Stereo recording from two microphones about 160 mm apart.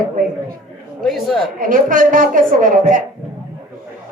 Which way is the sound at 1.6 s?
55° right (ahead or behind).